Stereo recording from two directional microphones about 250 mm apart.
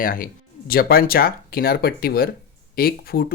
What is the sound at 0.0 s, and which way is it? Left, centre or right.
Speech, left.